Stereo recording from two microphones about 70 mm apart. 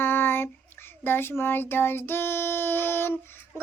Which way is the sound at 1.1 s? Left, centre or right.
Left.